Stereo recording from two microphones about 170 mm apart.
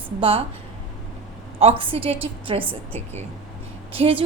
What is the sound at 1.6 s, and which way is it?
A woman's voice, 35° right (ahead or behind).